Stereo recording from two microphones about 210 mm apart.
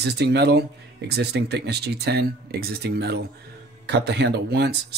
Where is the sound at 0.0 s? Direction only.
50° right (ahead or behind).